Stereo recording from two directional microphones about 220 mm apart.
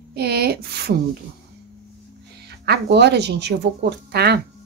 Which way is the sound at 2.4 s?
45° right (ahead or behind).